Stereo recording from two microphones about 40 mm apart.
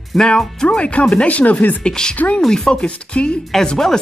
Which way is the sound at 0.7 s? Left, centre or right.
Left.